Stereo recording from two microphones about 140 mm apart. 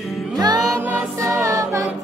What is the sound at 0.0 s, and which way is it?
Music, centre (ahead or behind).